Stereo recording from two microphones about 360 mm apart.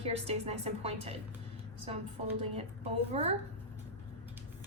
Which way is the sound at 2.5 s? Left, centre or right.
Centre.